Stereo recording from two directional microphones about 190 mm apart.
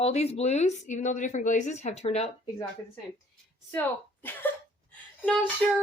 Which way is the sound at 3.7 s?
10° left (ahead or behind).